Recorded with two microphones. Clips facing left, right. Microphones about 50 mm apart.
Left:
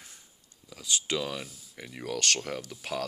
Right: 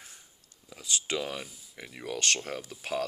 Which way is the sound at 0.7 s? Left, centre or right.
Right.